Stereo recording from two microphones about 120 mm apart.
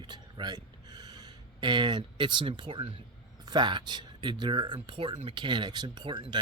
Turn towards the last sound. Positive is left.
turn(degrees=-40)  # may be behind; listen again after turning